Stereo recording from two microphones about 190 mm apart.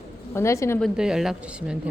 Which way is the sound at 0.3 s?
15° left (ahead or behind).